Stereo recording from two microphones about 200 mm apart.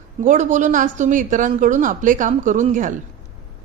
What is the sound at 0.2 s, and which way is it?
A woman's voice, 40° right (ahead or behind).